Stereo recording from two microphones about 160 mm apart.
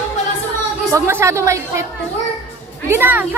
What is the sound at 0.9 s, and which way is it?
Speech, 15° right (ahead or behind).